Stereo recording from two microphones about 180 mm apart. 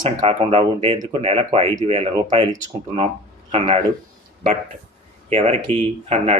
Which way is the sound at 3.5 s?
30° right (ahead or behind).